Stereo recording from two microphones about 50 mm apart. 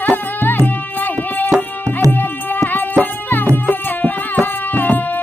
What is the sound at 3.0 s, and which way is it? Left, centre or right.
Music, left.